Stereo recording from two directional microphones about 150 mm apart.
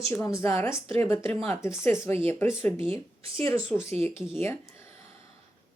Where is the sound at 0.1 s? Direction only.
20° left (ahead or behind).